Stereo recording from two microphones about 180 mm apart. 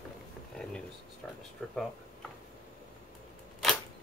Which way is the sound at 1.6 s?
10° left (ahead or behind).